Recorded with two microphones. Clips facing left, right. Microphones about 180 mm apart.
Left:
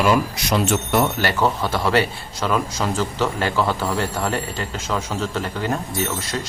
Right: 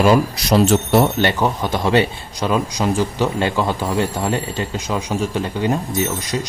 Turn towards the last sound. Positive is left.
turn(degrees=-15)  # may be behind; listen again after turning